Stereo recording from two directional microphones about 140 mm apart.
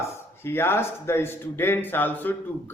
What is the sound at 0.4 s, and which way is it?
Speech, 15° left (ahead or behind).